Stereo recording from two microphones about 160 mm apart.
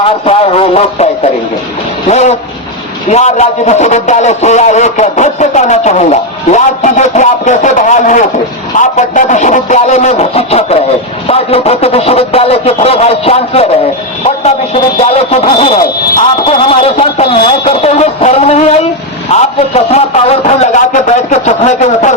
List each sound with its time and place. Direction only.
0.0 s a man's voice: 40° left (ahead or behind)